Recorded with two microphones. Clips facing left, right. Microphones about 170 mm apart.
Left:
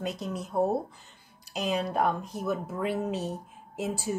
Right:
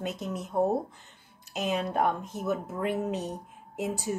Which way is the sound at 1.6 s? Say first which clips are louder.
Even; 20° right (ahead or behind).